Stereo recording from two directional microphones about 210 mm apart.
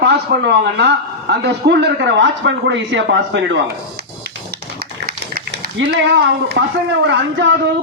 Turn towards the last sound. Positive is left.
turn(degrees=-60)  # may be behind; listen again after turning